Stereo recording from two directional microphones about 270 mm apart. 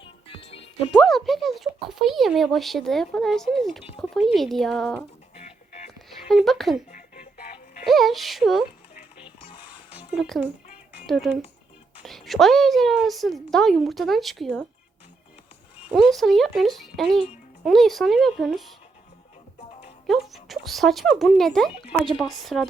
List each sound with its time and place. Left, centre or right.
0.0 s music: centre
0.9 s speech: centre
5.4 s music: left
5.9 s a sound: centre
7.9 s speech: centre
10.1 s speech: centre
16.0 s speech: centre
20.1 s speech: centre